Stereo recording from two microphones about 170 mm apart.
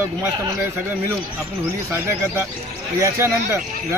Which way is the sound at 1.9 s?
10° right (ahead or behind).